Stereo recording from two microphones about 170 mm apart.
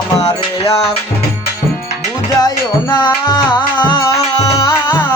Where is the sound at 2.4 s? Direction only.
25° left (ahead or behind).